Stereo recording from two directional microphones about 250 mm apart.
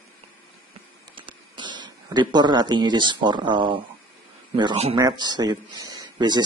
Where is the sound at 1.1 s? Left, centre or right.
Centre.